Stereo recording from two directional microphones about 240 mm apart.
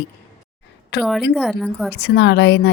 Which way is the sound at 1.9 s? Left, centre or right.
Left.